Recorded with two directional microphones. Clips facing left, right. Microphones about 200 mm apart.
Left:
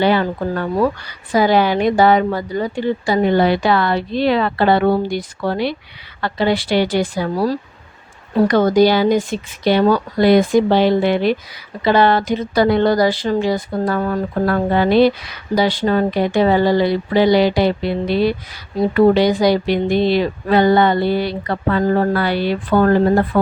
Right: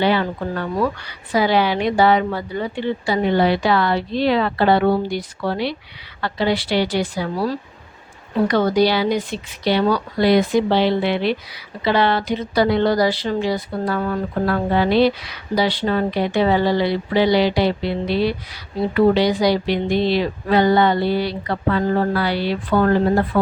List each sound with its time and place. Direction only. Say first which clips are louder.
0.0 s a woman's voice: left 3 dB; 45° left (ahead or behind)